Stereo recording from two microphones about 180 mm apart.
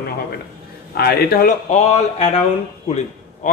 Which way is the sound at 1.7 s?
35° left (ahead or behind).